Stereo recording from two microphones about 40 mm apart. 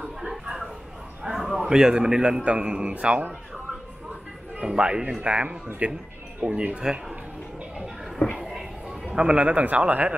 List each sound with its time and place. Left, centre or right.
1.2 s a sound: centre
1.6 s a man's voice: centre
4.6 s a man's voice: right
6.4 s a man's voice: centre
8.4 s a sound: centre
9.0 s a man's voice: right
9.6 s speech: right